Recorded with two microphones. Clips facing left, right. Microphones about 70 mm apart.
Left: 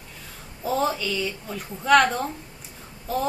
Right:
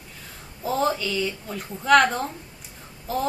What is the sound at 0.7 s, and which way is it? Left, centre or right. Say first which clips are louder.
Speech: even; centre.